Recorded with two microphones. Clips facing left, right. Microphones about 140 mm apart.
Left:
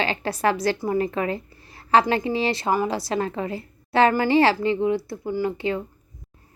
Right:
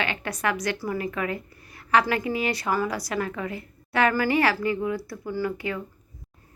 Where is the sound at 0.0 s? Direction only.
30° left (ahead or behind).